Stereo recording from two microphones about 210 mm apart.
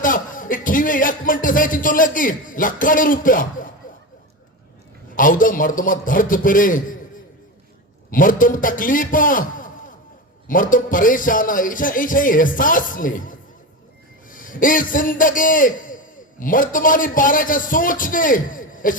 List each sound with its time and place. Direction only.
0.0 s speech: 40° left (ahead or behind)
5.1 s speech: 40° left (ahead or behind)
8.1 s a man's voice: 40° left (ahead or behind)